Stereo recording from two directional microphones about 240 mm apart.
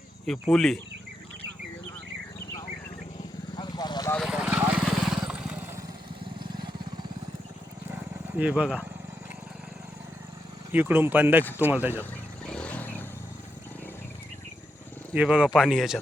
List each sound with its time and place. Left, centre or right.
0.3 s speech: centre
3.5 s vehicle: centre
4.1 s vehicle: centre
6.4 s vehicle: centre
7.9 s a sound: centre
10.7 s speech: centre
12.5 s vehicle: centre
15.1 s speech: centre